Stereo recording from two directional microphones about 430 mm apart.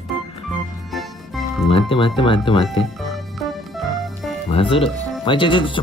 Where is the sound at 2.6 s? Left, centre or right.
Centre.